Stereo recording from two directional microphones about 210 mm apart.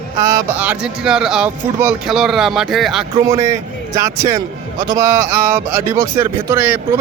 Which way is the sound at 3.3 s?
15° right (ahead or behind).